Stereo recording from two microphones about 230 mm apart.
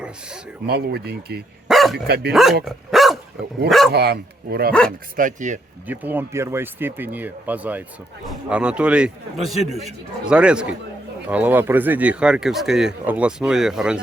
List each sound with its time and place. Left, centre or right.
0.7 s speech: right
1.6 s dog: centre
2.0 s speech: right
2.3 s speech: centre
2.6 s dog: centre
3.7 s speech: centre
3.9 s speech: right
5.9 s speech: centre